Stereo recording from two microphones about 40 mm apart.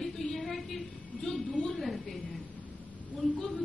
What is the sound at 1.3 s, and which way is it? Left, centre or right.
Speech, centre.